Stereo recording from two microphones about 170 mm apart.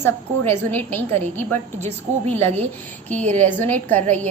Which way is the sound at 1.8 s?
35° right (ahead or behind).